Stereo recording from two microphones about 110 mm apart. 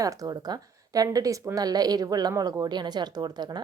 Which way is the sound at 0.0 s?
30° right (ahead or behind).